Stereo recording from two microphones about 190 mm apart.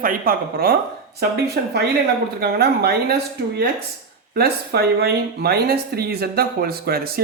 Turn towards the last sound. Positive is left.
turn(degrees=-55)  # may be behind; listen again after turning